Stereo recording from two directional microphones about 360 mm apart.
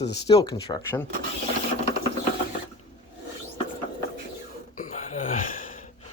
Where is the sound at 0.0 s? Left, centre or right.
Left.